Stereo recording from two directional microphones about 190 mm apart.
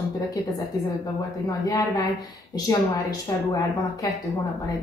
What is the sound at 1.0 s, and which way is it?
Speech, 20° left (ahead or behind).